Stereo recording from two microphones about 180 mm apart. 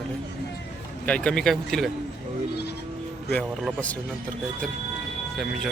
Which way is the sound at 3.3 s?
5° left (ahead or behind).